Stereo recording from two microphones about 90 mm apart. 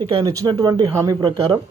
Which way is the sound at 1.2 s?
55° right (ahead or behind).